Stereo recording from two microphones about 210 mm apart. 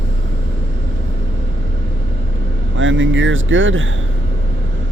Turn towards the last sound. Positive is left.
turn(degrees=-65)  # may be behind; listen again after turning